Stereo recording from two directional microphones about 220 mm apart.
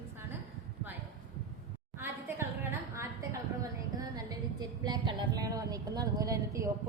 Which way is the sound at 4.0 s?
15° right (ahead or behind).